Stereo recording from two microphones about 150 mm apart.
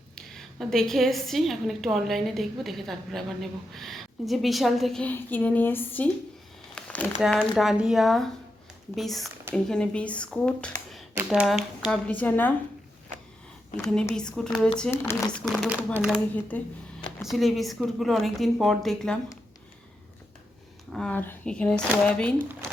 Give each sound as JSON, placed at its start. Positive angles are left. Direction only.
{"t": 0.2, "sound": "a woman's voice", "side_deg": 5}
{"t": 6.7, "sound": "a sound", "side_deg": 5}
{"t": 7.2, "sound": "a woman's voice", "side_deg": 5}
{"t": 9.3, "sound": "speech", "side_deg": -15}
{"t": 9.6, "sound": "speech", "side_deg": 5}
{"t": 11.2, "sound": "a woman's voice", "side_deg": -5}
{"t": 14.2, "sound": "a woman's voice", "side_deg": 5}
{"t": 16.5, "sound": "speech", "side_deg": 10}
{"t": 17.2, "sound": "a woman's voice", "side_deg": 0}
{"t": 20.9, "sound": "speech", "side_deg": 10}